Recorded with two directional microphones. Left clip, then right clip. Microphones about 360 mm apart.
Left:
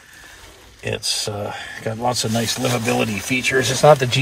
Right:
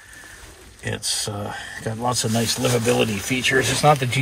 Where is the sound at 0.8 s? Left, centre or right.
Left.